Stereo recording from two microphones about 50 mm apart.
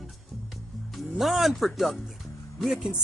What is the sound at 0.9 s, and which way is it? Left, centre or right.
Speech, centre.